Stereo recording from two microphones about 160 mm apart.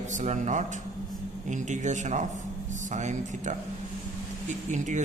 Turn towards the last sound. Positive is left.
turn(degrees=-50)  # may be behind; listen again after turning